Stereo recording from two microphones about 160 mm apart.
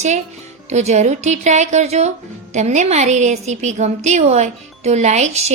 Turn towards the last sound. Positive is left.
turn(degrees=-45)  # may be behind; listen again after turning